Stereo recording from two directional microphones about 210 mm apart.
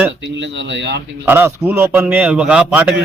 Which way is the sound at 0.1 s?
60° right (ahead or behind).